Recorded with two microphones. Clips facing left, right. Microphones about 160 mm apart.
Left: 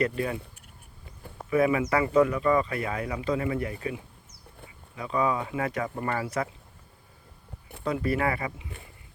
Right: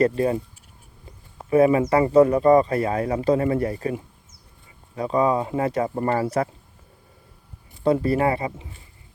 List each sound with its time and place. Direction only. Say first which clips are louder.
0.0 s speech: right 8 dB; 35° right (ahead or behind)
1.5 s speech: right 7 dB; 35° right (ahead or behind)
7.9 s speech: right 7 dB; 30° right (ahead or behind)